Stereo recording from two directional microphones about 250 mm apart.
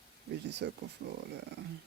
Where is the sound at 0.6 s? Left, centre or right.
Right.